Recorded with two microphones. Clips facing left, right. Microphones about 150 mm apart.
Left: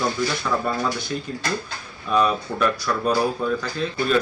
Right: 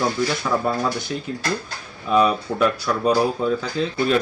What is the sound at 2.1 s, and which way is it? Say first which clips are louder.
Speech: right 2 dB; 10° right (ahead or behind).